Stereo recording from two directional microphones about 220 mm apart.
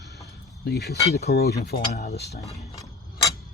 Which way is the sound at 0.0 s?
50° left (ahead or behind).